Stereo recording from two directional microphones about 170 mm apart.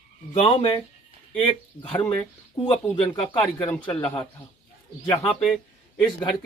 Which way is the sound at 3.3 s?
10° left (ahead or behind).